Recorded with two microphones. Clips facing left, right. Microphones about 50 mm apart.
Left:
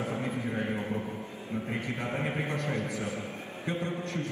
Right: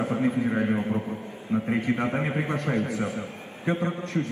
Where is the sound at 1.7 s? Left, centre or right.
Right.